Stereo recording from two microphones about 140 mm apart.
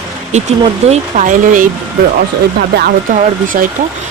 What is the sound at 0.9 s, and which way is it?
Speech, 65° right (ahead or behind).